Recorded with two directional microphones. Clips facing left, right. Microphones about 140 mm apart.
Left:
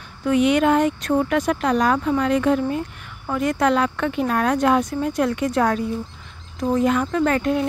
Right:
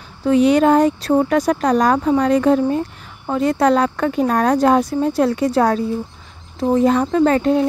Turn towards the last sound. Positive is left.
turn(degrees=-30)  # may be behind; listen again after turning